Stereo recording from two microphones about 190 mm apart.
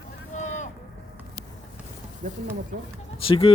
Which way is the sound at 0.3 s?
40° left (ahead or behind).